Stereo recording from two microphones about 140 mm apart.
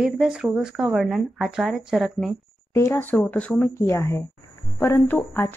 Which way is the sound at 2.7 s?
20° left (ahead or behind).